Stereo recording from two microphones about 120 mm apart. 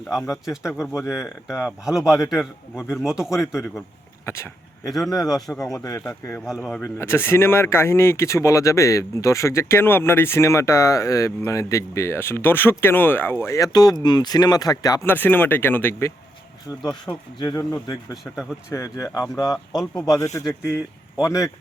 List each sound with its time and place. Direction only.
0.4 s a man's voice: 5° right (ahead or behind)
0.7 s speech: 20° left (ahead or behind)
1.6 s a man's voice: 5° right (ahead or behind)
2.0 s speech: 25° left (ahead or behind)
2.3 s a man's voice: centre (ahead or behind)
4.3 s speech: 20° left (ahead or behind)
5.5 s a man's voice: centre (ahead or behind)
5.8 s speech: 25° left (ahead or behind)
15.0 s speech: 15° left (ahead or behind)
16.9 s speech: 35° left (ahead or behind)